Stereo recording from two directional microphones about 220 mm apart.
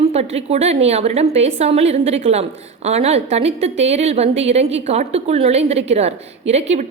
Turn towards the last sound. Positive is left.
turn(degrees=-30)  # may be behind; listen again after turning